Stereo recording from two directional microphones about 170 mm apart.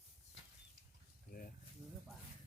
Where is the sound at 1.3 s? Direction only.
60° left (ahead or behind).